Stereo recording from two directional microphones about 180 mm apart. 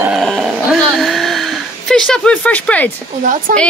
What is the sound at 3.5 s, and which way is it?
Speech, 50° right (ahead or behind).